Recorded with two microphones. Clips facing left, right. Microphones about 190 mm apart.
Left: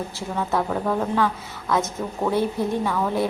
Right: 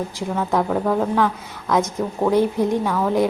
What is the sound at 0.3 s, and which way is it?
Speech, 5° right (ahead or behind).